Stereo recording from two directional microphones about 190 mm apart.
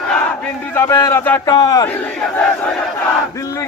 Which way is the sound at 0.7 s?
15° left (ahead or behind).